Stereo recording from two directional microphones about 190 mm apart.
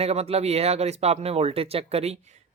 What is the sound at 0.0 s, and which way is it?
Speech, 35° right (ahead or behind).